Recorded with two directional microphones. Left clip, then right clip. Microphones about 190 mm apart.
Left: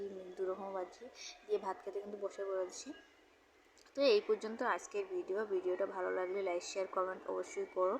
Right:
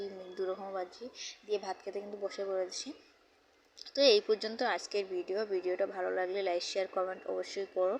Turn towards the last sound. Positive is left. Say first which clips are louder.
# right 3 dB
turn(degrees=-5)  # may be behind; listen again after turning